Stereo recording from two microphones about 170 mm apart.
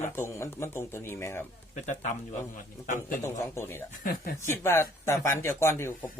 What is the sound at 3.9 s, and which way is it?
Speech, 60° left (ahead or behind).